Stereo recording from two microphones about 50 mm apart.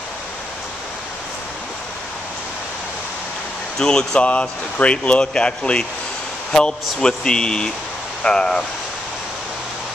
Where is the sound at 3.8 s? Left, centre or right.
Centre.